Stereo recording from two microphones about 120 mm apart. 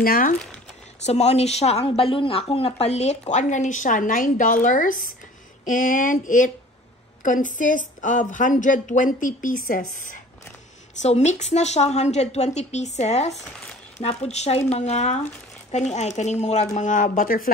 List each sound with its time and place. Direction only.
1.0 s a woman's voice: 65° left (ahead or behind); by 10.2 s 90° left
11.0 s speech: 70° left (ahead or behind); by 17.1 s 90° left